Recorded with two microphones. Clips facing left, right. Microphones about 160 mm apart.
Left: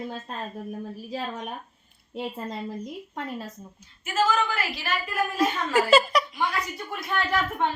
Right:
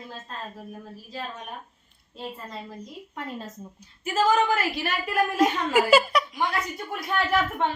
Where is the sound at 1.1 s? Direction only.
70° left (ahead or behind).